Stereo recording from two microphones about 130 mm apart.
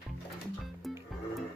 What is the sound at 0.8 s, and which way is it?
Music, centre (ahead or behind).